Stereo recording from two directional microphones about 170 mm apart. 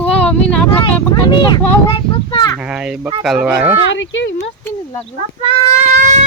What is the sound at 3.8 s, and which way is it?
Speech, 90° left.